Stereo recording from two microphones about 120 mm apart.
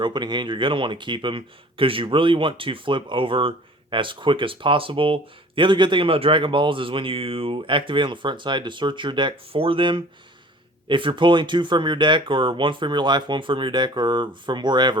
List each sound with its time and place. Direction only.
0.0 s speech: 40° right (ahead or behind)